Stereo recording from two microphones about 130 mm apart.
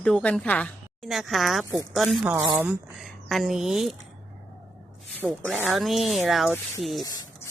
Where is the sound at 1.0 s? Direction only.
Centre (ahead or behind).